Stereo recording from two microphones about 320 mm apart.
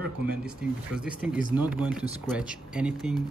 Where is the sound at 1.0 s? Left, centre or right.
Centre.